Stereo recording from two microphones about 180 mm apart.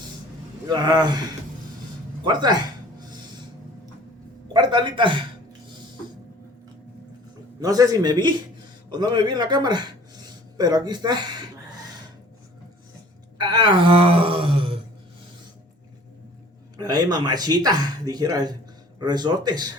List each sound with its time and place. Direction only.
0.7 s speech: 25° right (ahead or behind)
2.2 s speech: 25° right (ahead or behind)
4.5 s speech: 25° right (ahead or behind)
7.6 s a man's voice: 20° right (ahead or behind)
10.2 s a sound: 20° right (ahead or behind)
13.4 s speech: 25° right (ahead or behind)
16.7 s speech: 20° right (ahead or behind)